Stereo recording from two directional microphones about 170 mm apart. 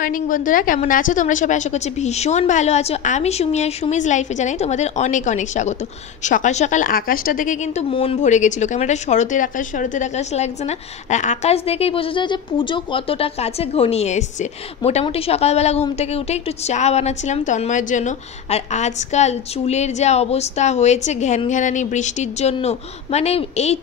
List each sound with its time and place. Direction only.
0.0 s a woman's voice: 55° left (ahead or behind)